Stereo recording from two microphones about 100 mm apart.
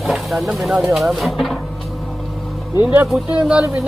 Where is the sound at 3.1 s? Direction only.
10° right (ahead or behind).